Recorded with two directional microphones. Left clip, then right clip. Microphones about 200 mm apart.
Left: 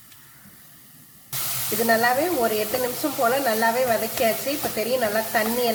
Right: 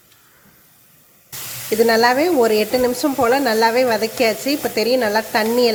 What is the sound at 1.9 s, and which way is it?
A woman's voice, 40° right (ahead or behind).